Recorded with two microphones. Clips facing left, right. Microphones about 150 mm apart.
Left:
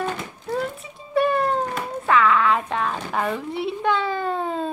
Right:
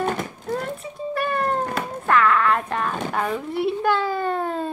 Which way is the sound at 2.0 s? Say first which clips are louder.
Even; centre (ahead or behind).